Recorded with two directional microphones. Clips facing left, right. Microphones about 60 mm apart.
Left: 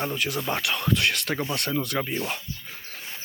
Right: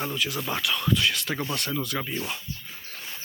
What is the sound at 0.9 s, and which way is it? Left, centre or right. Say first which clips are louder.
Speech: left 1 dB; left.